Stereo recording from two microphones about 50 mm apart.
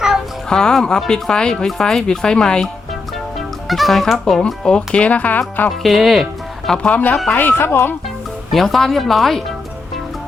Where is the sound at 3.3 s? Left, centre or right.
Centre.